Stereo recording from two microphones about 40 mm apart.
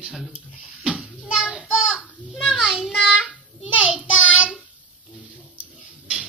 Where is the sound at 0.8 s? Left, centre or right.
Right.